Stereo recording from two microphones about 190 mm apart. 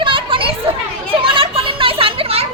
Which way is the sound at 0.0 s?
25° right (ahead or behind).